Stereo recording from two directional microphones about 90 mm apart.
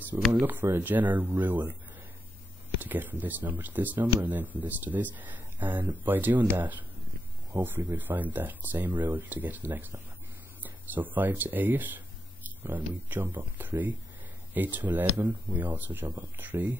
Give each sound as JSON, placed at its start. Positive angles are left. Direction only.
{"t": 0.3, "sound": "speech", "side_deg": -20}
{"t": 2.8, "sound": "speech", "side_deg": -20}